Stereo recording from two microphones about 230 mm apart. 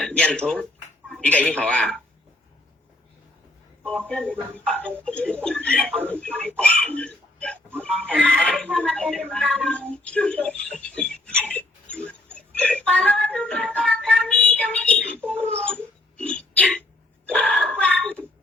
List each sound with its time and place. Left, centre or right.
0.0 s speech: centre
4.1 s speech: centre
11.4 s a sound: centre
12.5 s speech: centre
16.1 s a sound: centre
17.2 s speech: centre